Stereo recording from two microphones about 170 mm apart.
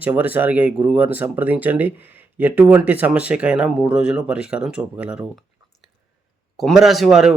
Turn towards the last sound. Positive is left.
turn(degrees=0)  # may be behind; listen again after turning